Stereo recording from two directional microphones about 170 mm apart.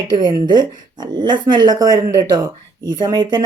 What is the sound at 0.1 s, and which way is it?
Speech, 25° right (ahead or behind).